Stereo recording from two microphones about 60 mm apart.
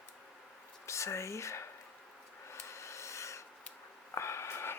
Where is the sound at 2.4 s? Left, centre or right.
Left.